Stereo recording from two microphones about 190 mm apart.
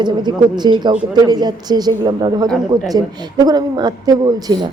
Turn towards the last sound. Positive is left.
turn(degrees=-20)  # may be behind; listen again after turning